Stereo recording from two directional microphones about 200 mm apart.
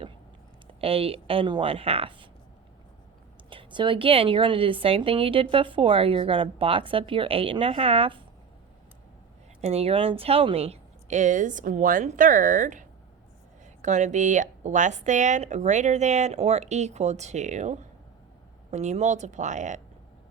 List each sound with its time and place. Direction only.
0.8 s a woman's voice: 30° right (ahead or behind)
3.5 s a woman's voice: 25° right (ahead or behind)
9.6 s speech: 30° right (ahead or behind)